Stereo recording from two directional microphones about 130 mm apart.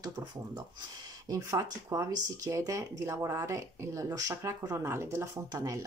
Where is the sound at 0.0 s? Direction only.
35° right (ahead or behind).